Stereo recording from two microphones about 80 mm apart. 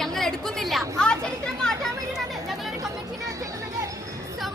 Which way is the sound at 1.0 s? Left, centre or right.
Centre.